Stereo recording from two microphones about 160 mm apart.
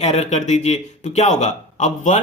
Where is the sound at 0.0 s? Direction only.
45° left (ahead or behind).